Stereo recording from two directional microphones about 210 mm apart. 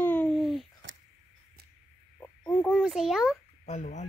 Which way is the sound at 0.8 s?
65° right (ahead or behind).